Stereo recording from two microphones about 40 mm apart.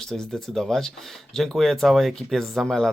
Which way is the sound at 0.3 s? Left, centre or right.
Centre.